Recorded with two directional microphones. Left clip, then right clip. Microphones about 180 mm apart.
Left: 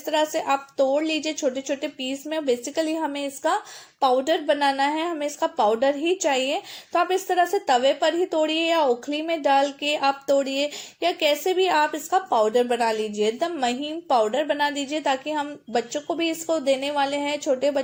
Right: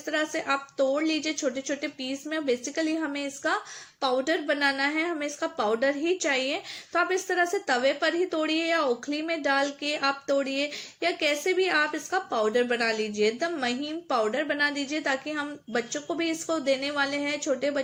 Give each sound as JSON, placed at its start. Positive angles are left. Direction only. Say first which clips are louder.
{"t": 0.0, "sound": "a woman's voice", "louder": "left 6 dB", "side_deg": 30}